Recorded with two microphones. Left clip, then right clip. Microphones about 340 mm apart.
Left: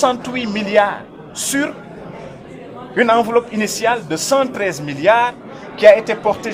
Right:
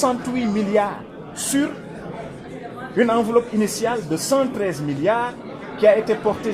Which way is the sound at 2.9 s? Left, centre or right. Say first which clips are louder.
Left 4 dB; left.